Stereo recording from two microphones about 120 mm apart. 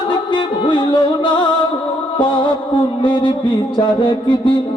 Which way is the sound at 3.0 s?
45° left (ahead or behind).